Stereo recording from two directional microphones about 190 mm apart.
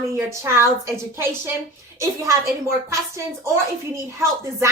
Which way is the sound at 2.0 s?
15° right (ahead or behind).